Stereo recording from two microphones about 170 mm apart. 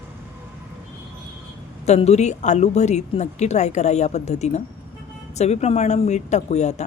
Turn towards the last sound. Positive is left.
turn(degrees=40)  # may be behind; listen again after turning